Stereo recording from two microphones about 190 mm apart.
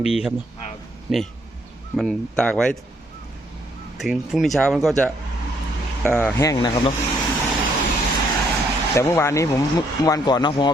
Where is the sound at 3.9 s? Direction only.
Centre (ahead or behind).